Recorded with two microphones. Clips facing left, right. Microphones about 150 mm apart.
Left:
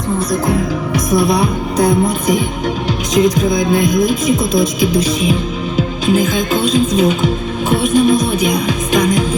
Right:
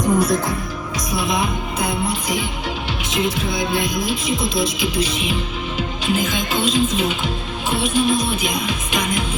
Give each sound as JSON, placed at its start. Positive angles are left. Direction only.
{"t": 0.9, "sound": "speech", "side_deg": 40}
{"t": 7.7, "sound": "music", "side_deg": 45}